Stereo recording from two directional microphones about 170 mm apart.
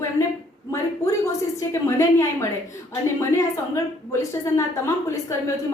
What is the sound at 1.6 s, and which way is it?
A woman's voice, 15° left (ahead or behind).